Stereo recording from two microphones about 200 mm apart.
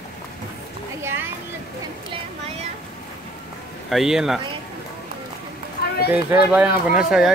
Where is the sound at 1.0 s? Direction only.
10° right (ahead or behind).